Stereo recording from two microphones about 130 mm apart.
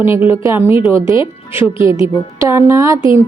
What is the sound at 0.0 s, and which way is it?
Speech, 15° right (ahead or behind).